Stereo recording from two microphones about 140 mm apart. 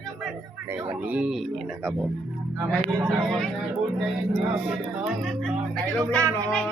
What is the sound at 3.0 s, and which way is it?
Speech, centre (ahead or behind).